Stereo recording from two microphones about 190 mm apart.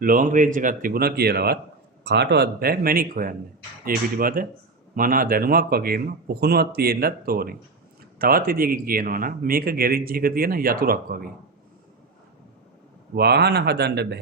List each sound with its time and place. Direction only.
0.0 s a man's voice: 45° right (ahead or behind)
13.1 s speech: 60° right (ahead or behind)